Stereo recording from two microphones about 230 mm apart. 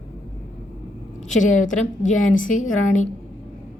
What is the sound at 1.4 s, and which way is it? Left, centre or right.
A woman's voice, left.